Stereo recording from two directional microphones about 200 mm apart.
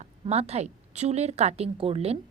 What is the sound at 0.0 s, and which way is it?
A woman's voice, 30° right (ahead or behind).